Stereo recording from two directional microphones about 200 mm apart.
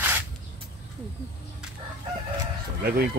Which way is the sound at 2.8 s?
50° right (ahead or behind).